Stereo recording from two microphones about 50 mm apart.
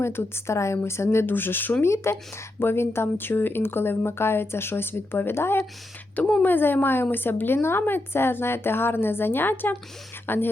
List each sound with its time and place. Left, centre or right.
0.0 s speech: left
0.4 s a woman's voice: left
1.3 s speech: left
1.8 s speech: left
6.1 s speech: left
6.4 s speech: left